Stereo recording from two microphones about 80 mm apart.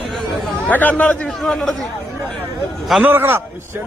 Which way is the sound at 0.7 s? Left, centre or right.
Left.